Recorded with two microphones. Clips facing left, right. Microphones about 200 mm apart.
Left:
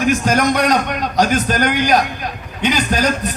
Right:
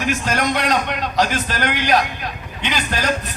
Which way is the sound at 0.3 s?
40° left (ahead or behind).